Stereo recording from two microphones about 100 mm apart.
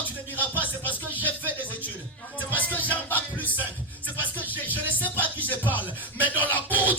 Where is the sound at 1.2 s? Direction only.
15° left (ahead or behind).